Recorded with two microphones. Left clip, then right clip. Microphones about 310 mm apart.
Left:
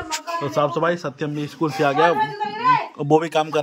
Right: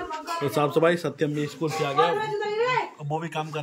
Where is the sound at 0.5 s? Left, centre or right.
Centre.